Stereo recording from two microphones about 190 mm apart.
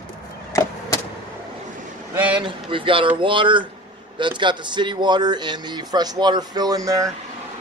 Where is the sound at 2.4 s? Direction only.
25° right (ahead or behind).